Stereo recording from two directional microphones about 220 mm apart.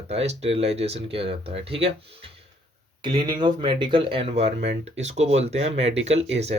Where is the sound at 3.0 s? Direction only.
20° right (ahead or behind).